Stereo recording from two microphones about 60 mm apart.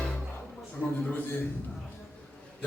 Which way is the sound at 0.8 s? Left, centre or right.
Left.